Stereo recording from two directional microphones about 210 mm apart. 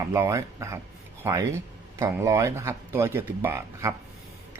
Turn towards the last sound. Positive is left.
turn(degrees=-10)  # may be behind; listen again after turning